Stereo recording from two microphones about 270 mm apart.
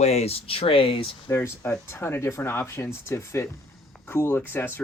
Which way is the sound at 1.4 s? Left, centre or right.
Centre.